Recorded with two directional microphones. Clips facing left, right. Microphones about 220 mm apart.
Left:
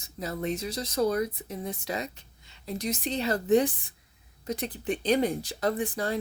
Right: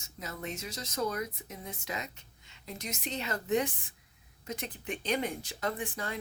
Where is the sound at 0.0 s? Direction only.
35° left (ahead or behind).